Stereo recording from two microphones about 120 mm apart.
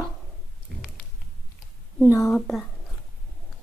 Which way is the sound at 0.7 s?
5° left (ahead or behind).